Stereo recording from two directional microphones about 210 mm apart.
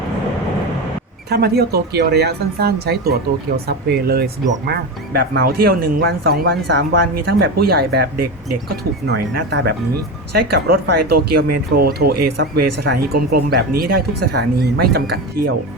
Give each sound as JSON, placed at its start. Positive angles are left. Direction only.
{"t": 1.3, "sound": "speech", "side_deg": -50}